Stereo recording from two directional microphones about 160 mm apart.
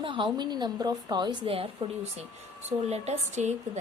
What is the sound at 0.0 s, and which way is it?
A woman's voice, 30° right (ahead or behind).